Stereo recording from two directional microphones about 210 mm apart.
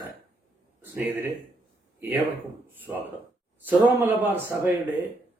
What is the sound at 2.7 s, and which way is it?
Speech, 10° right (ahead or behind).